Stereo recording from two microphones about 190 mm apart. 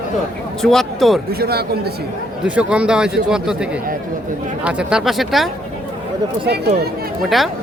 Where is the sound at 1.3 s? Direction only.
55° right (ahead or behind).